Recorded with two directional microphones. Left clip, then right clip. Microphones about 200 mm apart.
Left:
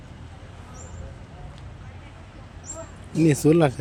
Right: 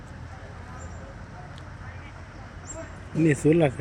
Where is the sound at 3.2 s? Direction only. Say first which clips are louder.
Left 2 dB; 30° left (ahead or behind).